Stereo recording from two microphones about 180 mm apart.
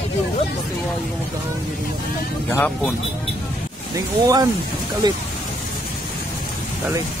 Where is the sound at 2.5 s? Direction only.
10° left (ahead or behind).